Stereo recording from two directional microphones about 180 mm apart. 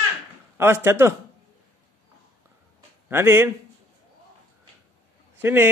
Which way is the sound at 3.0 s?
10° right (ahead or behind).